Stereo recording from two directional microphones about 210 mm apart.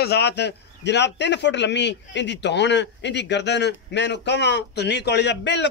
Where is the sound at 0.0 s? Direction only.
50° left (ahead or behind).